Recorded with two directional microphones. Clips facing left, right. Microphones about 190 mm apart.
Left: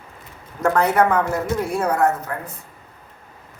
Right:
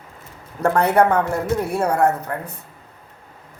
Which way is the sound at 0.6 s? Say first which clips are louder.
Right 1 dB; 30° right (ahead or behind).